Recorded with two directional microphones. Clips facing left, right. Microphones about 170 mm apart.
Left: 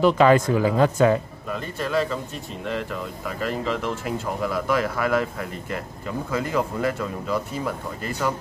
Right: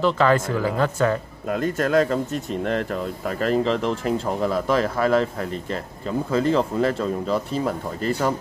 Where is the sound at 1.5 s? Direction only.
50° right (ahead or behind).